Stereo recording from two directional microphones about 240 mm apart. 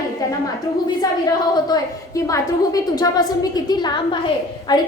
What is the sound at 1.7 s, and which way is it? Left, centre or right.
A woman's voice, centre.